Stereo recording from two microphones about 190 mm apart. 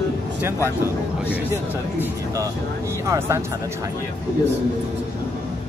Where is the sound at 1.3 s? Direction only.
10° right (ahead or behind).